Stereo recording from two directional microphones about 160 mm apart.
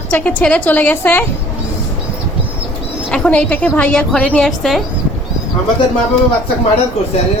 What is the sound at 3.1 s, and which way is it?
A woman's voice, 5° left (ahead or behind).